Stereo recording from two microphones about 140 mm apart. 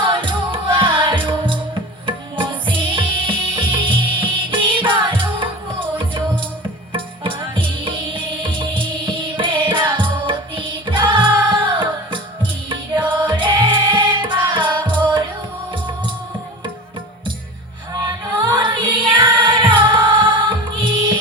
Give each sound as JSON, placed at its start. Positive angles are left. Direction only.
{"t": 0.0, "sound": "music", "side_deg": -35}
{"t": 17.9, "sound": "music", "side_deg": -30}